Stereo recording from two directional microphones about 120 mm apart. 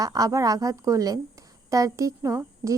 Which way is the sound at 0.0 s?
30° right (ahead or behind).